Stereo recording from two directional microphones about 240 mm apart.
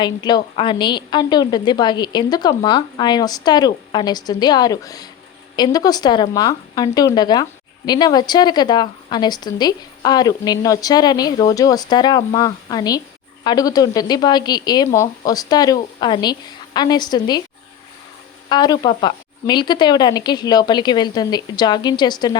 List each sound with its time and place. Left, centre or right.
0.0 s a woman's voice: centre
18.4 s a woman's voice: centre